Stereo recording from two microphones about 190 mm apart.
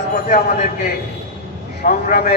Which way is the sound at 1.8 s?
50° left (ahead or behind).